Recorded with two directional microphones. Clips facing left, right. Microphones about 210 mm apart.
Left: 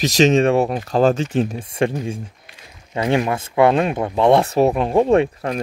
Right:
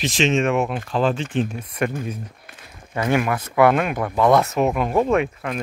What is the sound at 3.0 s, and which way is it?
Speech, 25° left (ahead or behind).